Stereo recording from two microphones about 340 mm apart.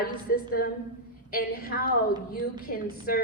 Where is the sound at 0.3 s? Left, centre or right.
Left.